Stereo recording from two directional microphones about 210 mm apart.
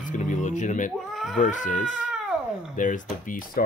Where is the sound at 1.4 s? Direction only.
35° left (ahead or behind).